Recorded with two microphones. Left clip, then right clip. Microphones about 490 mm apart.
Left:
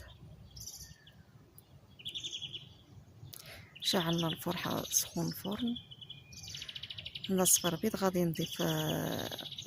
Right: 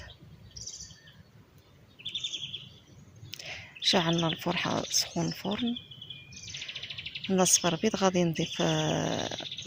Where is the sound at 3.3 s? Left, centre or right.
Right.